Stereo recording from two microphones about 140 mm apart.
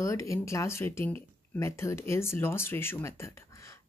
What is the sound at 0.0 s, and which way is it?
Speech, 20° left (ahead or behind).